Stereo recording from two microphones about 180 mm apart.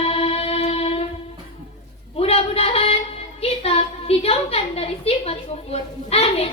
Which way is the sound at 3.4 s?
35° left (ahead or behind).